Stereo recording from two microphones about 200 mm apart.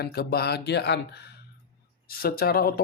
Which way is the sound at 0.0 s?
50° left (ahead or behind).